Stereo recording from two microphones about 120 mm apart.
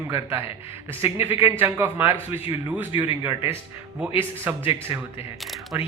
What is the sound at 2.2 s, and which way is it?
Speech, 50° left (ahead or behind).